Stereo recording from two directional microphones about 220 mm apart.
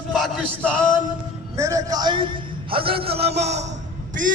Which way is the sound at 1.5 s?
15° right (ahead or behind).